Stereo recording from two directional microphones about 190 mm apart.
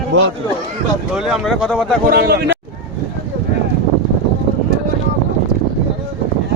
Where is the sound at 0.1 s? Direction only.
70° right (ahead or behind).